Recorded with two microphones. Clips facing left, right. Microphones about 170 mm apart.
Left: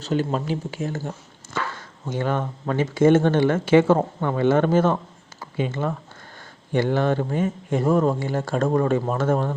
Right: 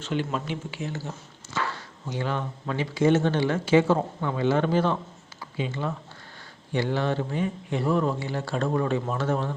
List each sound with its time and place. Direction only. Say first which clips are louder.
0.0 s speech: left 5 dB; 40° left (ahead or behind)